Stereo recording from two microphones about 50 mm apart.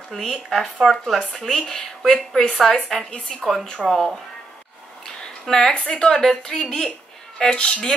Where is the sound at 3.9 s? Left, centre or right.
Centre.